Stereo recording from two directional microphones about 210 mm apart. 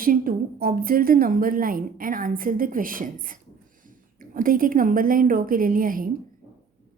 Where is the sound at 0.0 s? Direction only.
40° right (ahead or behind).